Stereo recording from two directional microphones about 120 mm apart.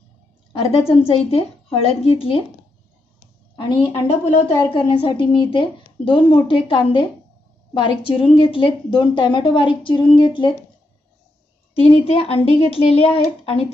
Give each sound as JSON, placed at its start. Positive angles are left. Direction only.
{"t": 0.5, "sound": "a woman's voice", "side_deg": 50}
{"t": 3.5, "sound": "a woman's voice", "side_deg": 40}
{"t": 11.8, "sound": "a woman's voice", "side_deg": 50}